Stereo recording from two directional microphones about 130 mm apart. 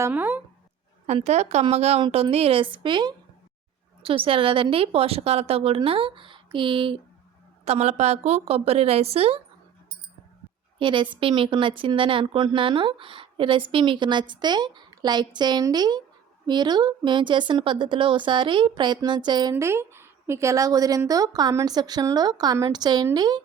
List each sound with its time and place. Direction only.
0.0 s speech: 15° right (ahead or behind)
1.0 s speech: 60° right (ahead or behind)
2.0 s a woman's voice: 35° right (ahead or behind)
2.3 s a woman's voice: 45° right (ahead or behind)
7.6 s a woman's voice: 55° right (ahead or behind)
10.8 s a woman's voice: 40° right (ahead or behind)